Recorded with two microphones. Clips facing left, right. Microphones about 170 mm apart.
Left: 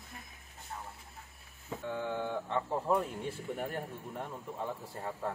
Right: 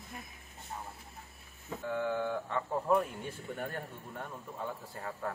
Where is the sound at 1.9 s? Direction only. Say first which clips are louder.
Right 3 dB; 25° left (ahead or behind).